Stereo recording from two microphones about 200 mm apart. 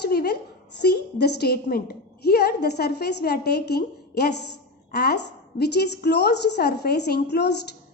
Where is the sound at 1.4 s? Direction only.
50° left (ahead or behind).